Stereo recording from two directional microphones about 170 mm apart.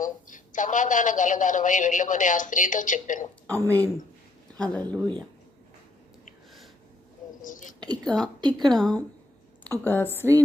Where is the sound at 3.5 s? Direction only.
10° left (ahead or behind).